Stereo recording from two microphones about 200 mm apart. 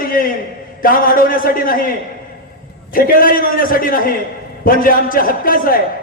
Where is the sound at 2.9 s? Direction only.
45° left (ahead or behind).